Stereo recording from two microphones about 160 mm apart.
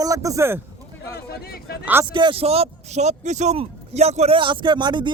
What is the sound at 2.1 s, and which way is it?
A man's voice, 30° right (ahead or behind).